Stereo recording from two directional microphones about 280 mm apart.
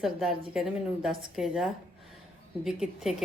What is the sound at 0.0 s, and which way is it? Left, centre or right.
A woman's voice, centre.